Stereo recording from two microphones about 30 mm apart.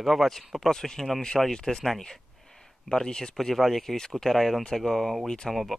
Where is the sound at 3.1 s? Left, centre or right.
Centre.